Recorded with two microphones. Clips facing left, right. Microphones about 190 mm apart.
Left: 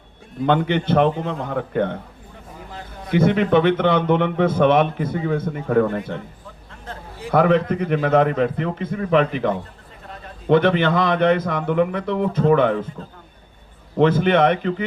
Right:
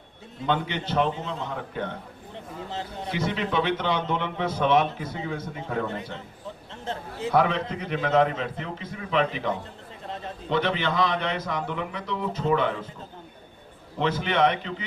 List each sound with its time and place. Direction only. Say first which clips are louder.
0.4 s a man's voice: left 8 dB; 55° left (ahead or behind)
3.1 s a man's voice: left 12 dB; 55° left (ahead or behind)
7.3 s a man's voice: left 7 dB; 50° left (ahead or behind)
14.0 s a man's voice: left 8 dB; 55° left (ahead or behind)